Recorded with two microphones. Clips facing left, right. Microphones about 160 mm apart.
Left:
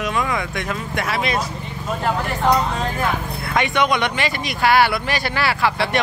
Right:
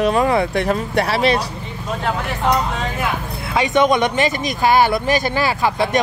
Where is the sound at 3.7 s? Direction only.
45° right (ahead or behind).